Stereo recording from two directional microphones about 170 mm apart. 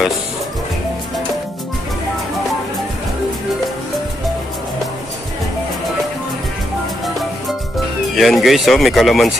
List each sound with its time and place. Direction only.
8.2 s speech: centre (ahead or behind)